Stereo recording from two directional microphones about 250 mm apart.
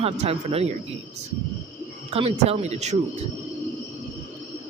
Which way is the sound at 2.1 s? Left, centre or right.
Right.